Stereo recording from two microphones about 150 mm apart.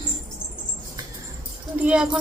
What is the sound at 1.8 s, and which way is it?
Speech, 5° right (ahead or behind).